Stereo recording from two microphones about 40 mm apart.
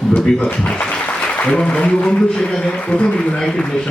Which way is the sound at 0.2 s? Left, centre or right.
Centre.